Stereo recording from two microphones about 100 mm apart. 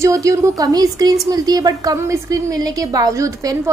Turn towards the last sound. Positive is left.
turn(degrees=-35)  # may be behind; listen again after turning